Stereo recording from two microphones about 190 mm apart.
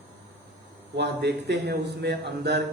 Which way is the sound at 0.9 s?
60° right (ahead or behind).